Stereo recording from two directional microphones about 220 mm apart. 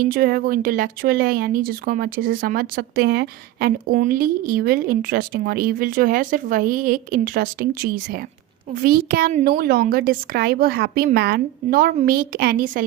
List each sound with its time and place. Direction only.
0.1 s a woman's voice: 40° right (ahead or behind)